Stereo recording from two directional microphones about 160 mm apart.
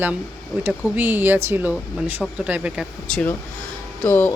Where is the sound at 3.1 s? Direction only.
5° left (ahead or behind).